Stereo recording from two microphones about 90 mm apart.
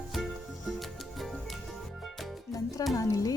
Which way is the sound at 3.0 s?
40° left (ahead or behind).